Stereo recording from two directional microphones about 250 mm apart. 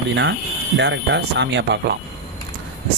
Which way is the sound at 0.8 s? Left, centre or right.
Right.